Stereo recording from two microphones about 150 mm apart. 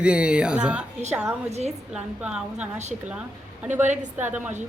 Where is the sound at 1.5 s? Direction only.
45° right (ahead or behind).